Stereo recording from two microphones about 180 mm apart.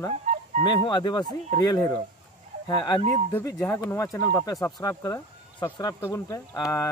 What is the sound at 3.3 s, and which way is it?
Speech, 15° left (ahead or behind).